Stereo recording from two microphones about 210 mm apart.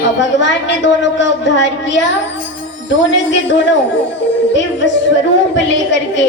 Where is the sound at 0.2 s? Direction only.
60° left (ahead or behind).